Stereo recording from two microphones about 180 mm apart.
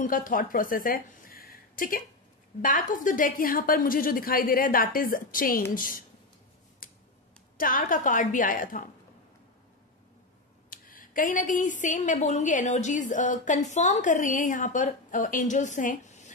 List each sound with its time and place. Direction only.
0.0 s a woman's voice: 50° left (ahead or behind)
6.8 s a sound: 50° left (ahead or behind)
7.5 s a woman's voice: 50° left (ahead or behind)
10.7 s a woman's voice: 50° left (ahead or behind)